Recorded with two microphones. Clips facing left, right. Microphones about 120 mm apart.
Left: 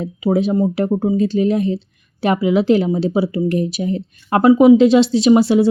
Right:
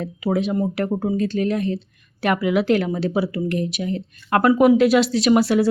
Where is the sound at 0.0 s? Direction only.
25° left (ahead or behind).